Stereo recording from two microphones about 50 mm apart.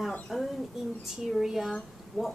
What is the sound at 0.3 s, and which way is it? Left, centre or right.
Bird, centre.